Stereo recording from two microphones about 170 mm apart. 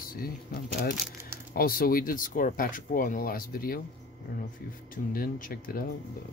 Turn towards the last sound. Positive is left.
turn(degrees=60)  # may be behind; listen again after turning